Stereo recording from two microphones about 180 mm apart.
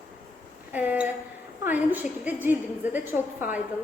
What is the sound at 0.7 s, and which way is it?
A woman's voice, 10° right (ahead or behind).